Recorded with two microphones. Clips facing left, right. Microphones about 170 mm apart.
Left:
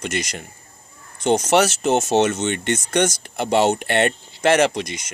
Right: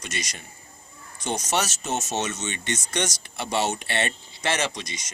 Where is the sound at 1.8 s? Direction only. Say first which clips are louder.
Left 10 dB; 90° left.